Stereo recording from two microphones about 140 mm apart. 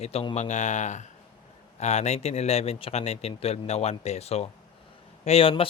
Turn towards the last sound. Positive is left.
turn(degrees=40)  # may be behind; listen again after turning